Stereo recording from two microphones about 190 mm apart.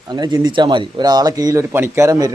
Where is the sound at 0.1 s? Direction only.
20° right (ahead or behind).